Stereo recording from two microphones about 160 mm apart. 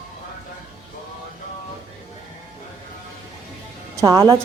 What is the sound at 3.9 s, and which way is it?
Speech, 20° right (ahead or behind).